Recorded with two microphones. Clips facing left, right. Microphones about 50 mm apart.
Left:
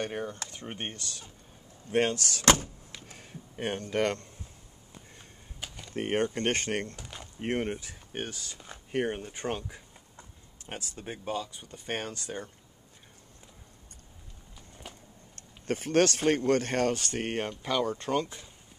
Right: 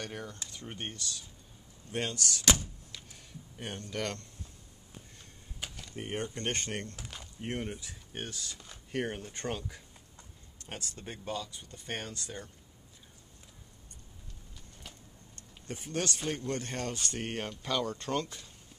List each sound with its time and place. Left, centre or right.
0.0 s speech: left
2.9 s a sound: left
5.6 s a sound: centre
5.9 s speech: left; by 9.6 s centre
9.6 s a sound: centre
10.7 s speech: centre; by 12.4 s left
14.8 s vehicle: centre
15.3 s speech: left
17.6 s speech: centre